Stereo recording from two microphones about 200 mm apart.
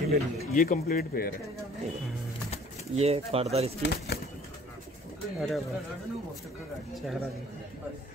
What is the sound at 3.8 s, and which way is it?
Speech, 55° left (ahead or behind).